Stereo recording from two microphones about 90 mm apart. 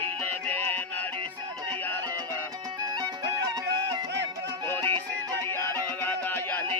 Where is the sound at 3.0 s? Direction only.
45° right (ahead or behind).